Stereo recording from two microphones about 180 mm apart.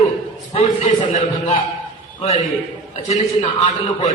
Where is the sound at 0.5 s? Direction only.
40° left (ahead or behind).